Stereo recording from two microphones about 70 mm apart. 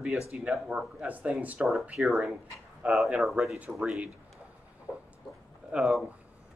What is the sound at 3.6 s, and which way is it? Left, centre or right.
Speech, right.